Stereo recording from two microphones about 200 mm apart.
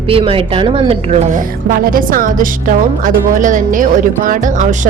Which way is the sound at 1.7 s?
45° right (ahead or behind).